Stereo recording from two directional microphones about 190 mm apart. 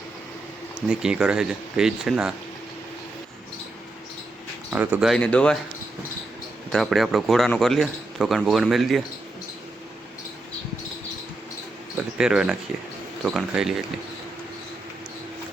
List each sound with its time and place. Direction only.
0.9 s a man's voice: 5° right (ahead or behind)
4.7 s a man's voice: 10° right (ahead or behind); by 5.5 s 5° left (ahead or behind)
6.7 s a man's voice: centre (ahead or behind)
11.9 s a man's voice: 5° right (ahead or behind)